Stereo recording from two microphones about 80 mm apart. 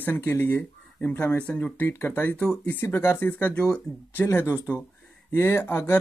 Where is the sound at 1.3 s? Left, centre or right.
Centre.